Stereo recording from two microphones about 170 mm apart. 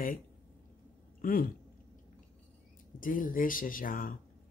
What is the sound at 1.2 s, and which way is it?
Speech, 55° left (ahead or behind).